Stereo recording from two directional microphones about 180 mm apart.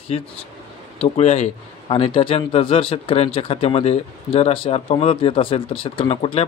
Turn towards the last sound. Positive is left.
turn(degrees=30)  # may be behind; listen again after turning